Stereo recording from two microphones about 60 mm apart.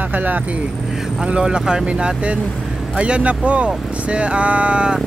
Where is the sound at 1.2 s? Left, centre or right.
Centre.